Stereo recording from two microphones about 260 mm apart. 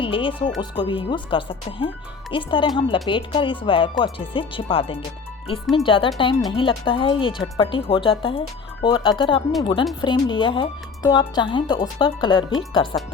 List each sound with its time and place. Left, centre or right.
0.0 s a woman's voice: centre